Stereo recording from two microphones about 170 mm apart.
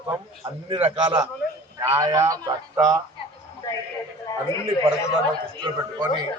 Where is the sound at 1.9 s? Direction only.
20° right (ahead or behind).